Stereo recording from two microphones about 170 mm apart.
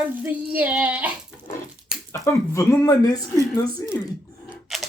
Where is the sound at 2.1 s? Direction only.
15° left (ahead or behind).